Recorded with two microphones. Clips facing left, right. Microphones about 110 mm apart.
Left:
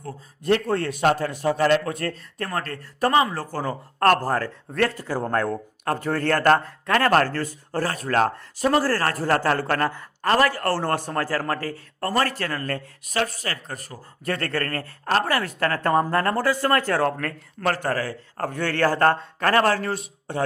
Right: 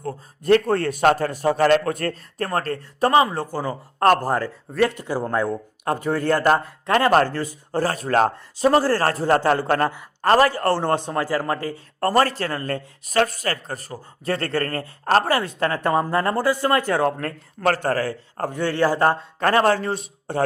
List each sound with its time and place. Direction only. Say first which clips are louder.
0.0 s a man's voice: right 3 dB; 45° right (ahead or behind)
2.5 s a man's voice: right 5 dB; 35° right (ahead or behind); by 6.7 s 10° right (ahead or behind)
6.8 s a man's voice: right 3 dB; 20° right (ahead or behind)
7.9 s a man's voice: right 3 dB; 30° right (ahead or behind)
11.9 s a man's voice: right 5 dB; 40° right (ahead or behind); by 12.8 s 25° right (ahead or behind)
13.1 s speech: right 5 dB; 45° right (ahead or behind); by 14.8 s 25° right (ahead or behind)
15.0 s speech: right 4 dB; 35° right (ahead or behind)
15.4 s speech: right 1 dB; 20° right (ahead or behind)
19.4 s a man's voice: right 3 dB; 25° right (ahead or behind)